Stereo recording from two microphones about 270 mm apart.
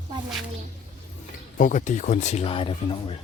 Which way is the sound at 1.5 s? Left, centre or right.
Left.